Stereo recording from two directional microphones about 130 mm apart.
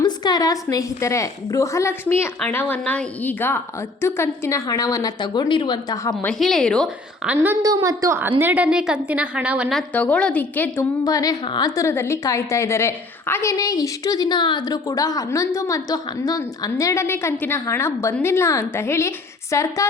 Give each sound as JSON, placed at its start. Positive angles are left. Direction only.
{"t": 0.0, "sound": "a woman's voice", "side_deg": 30}
{"t": 6.2, "sound": "a woman's voice", "side_deg": 5}
{"t": 7.3, "sound": "a woman's voice", "side_deg": -20}
{"t": 8.4, "sound": "a woman's voice", "side_deg": -10}
{"t": 9.7, "sound": "a woman's voice", "side_deg": 10}
{"t": 11.0, "sound": "a woman's voice", "side_deg": 30}